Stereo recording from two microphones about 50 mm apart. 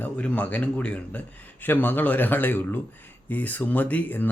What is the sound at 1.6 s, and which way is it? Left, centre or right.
Speech, left.